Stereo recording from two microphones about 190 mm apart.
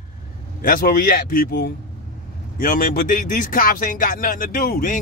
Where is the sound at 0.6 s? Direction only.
50° left (ahead or behind).